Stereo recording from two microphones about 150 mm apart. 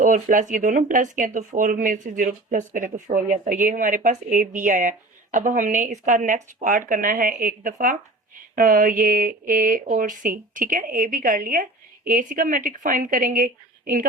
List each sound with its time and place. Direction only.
0.0 s speech: 60° right (ahead or behind)